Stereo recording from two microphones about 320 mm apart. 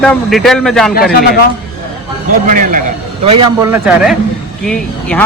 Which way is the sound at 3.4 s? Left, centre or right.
Centre.